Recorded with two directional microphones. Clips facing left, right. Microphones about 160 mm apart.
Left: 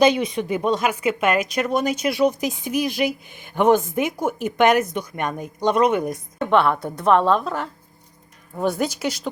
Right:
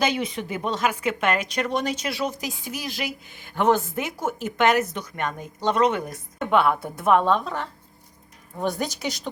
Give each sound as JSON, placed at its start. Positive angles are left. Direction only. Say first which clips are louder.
{"t": 0.0, "sound": "a woman's voice", "louder": "left 7 dB", "side_deg": 15}
{"t": 6.4, "sound": "a woman's voice", "louder": "left 2 dB", "side_deg": -5}